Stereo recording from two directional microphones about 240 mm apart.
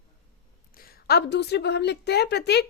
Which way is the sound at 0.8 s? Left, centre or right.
Left.